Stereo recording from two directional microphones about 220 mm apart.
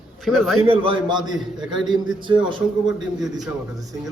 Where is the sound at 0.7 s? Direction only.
20° right (ahead or behind).